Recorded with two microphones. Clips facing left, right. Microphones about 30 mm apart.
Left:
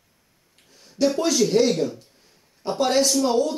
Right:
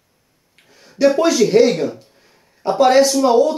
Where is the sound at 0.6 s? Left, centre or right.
Centre.